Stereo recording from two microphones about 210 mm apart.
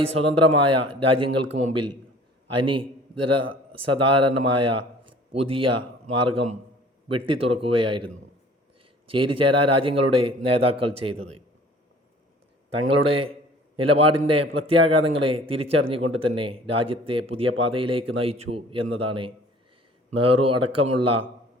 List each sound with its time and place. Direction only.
0.0 s a man's voice: 25° right (ahead or behind)
12.7 s speech: 25° right (ahead or behind)
20.3 s speech: 25° right (ahead or behind)